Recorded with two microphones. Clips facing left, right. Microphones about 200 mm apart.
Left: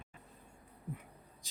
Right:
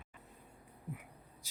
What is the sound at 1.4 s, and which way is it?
Vehicle, 10° right (ahead or behind).